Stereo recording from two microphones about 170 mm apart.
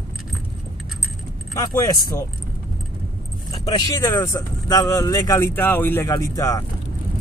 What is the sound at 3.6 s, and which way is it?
Speech, 20° left (ahead or behind).